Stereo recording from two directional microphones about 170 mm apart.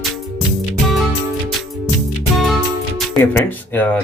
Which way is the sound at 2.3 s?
Centre (ahead or behind).